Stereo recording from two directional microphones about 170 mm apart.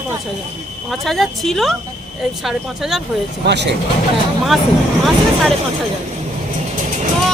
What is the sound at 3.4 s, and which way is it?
Speech, 90° right.